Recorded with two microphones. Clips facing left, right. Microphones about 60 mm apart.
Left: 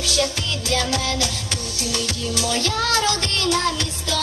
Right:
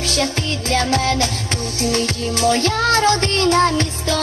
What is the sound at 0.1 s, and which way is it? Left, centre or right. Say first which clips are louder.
Music: right 1 dB; right.